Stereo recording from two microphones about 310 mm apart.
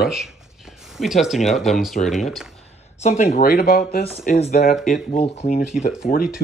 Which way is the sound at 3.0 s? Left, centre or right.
Left.